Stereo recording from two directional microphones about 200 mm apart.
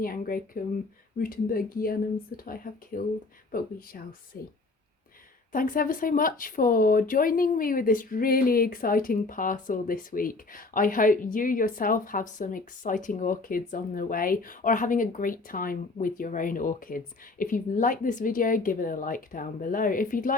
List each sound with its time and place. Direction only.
0.0 s speech: 45° left (ahead or behind)
5.5 s speech: 45° left (ahead or behind)